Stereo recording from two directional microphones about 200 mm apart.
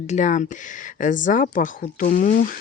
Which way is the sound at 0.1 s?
40° left (ahead or behind).